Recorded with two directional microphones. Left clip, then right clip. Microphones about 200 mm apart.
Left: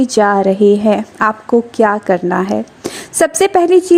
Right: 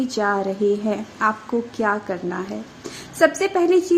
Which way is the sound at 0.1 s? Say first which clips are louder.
Left 11 dB; 35° left (ahead or behind).